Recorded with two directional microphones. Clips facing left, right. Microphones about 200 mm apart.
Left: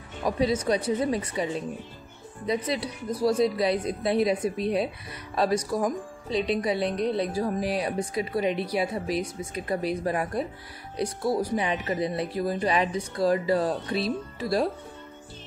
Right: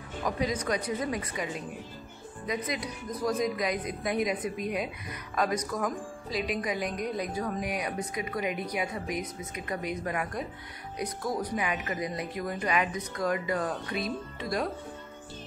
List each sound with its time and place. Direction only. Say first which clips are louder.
0.2 s speech: left 5 dB; 25° left (ahead or behind)